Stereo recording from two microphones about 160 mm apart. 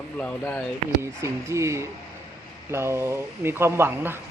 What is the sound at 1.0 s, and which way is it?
Speech, 15° right (ahead or behind).